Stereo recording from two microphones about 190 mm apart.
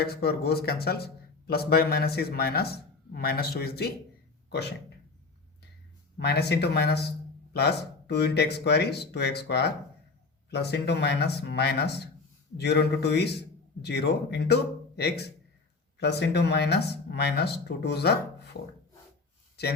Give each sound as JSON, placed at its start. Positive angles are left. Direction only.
{"t": 0.0, "sound": "speech", "side_deg": 55}
{"t": 6.1, "sound": "speech", "side_deg": 60}